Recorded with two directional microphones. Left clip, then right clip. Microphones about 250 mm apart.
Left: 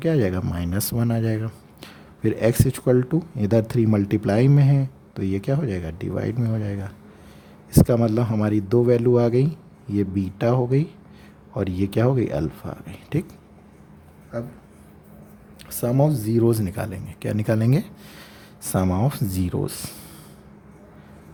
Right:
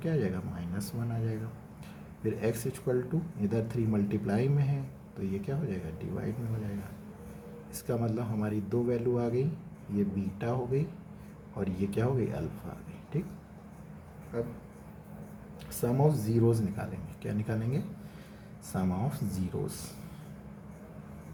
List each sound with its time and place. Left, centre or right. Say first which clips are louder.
0.0 s speech: left 11 dB; left
7.7 s speech: left 15 dB; left
15.7 s speech: left 7 dB; left